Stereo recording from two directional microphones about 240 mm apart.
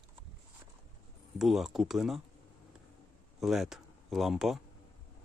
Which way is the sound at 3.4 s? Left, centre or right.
Centre.